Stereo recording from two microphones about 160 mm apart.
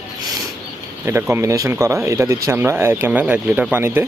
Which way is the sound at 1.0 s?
15° right (ahead or behind).